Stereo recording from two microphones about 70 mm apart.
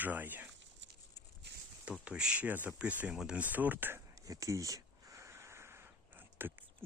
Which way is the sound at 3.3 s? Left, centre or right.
Right.